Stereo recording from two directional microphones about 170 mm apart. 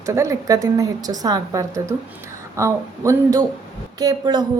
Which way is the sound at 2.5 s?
15° right (ahead or behind).